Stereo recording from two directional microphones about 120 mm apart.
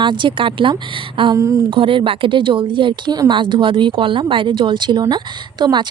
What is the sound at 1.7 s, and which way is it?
Speech, 45° right (ahead or behind).